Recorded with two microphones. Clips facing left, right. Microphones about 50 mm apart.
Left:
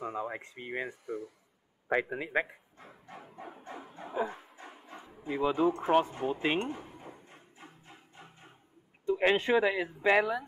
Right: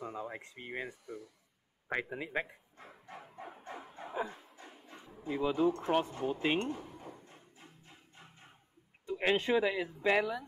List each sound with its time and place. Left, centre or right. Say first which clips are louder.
0.0 s speech: left 5 dB; left
2.8 s dog: left 1 dB; centre
3.9 s bow-wow: left 4 dB; centre
4.3 s dog: left 5 dB; left
5.7 s speech: left 4 dB; left
6.6 s a sound: left 1 dB; left
9.1 s speech: left 4 dB; left